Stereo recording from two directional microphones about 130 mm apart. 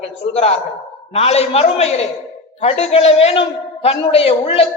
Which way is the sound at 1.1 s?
55° left (ahead or behind).